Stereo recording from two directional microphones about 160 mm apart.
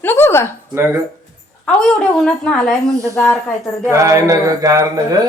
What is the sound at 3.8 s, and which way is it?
Mantra, 20° right (ahead or behind).